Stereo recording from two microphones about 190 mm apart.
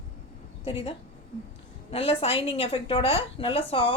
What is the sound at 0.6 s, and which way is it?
A woman's voice, 30° left (ahead or behind).